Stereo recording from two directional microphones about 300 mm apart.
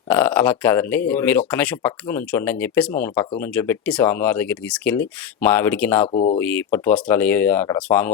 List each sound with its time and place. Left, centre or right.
0.1 s speech: centre
6.1 s speech: left
6.3 s speech: centre